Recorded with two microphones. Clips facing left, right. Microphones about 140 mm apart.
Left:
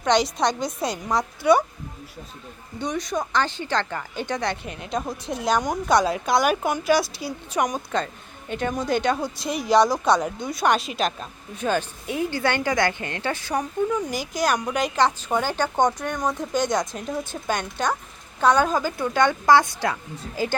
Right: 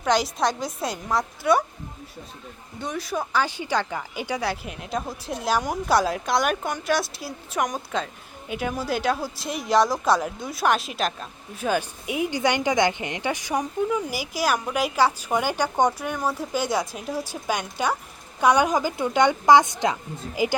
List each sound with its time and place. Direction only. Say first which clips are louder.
0.0 s a woman's voice: left 2 dB; 5° right (ahead or behind)
2.7 s a woman's voice: left 2 dB; centre (ahead or behind)